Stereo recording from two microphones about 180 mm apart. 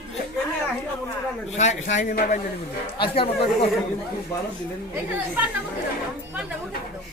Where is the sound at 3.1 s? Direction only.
30° left (ahead or behind).